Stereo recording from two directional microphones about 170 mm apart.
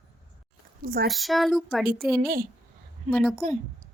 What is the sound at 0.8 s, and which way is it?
Speech, 60° right (ahead or behind).